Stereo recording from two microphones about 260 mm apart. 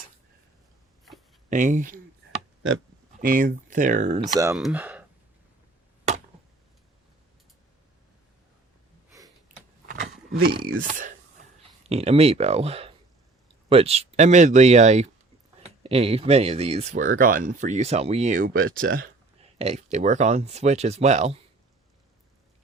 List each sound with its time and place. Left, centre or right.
1.5 s speech: right
3.2 s speech: right
4.5 s speech: centre
9.6 s a sound: right
11.9 s speech: right
19.5 s speech: right